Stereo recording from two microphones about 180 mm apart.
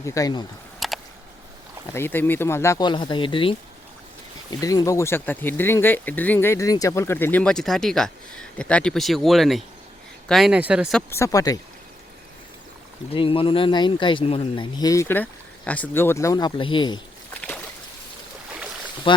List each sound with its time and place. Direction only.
0.0 s speech: 20° left (ahead or behind)
0.8 s a sound: centre (ahead or behind)
1.9 s speech: 10° left (ahead or behind); by 3.5 s 30° left (ahead or behind)
4.6 s speech: 20° left (ahead or behind); by 10.9 s 5° right (ahead or behind)
11.1 s speech: 15° left (ahead or behind)
13.1 s speech: 30° left (ahead or behind)
19.1 s speech: 30° left (ahead or behind)